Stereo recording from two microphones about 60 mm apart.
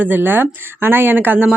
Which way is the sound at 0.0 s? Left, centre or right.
Right.